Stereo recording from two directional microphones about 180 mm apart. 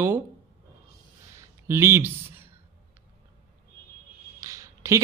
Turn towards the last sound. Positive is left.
turn(degrees=-15)  # may be behind; listen again after turning